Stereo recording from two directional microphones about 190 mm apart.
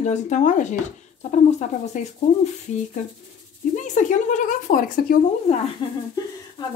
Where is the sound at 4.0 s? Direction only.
40° left (ahead or behind).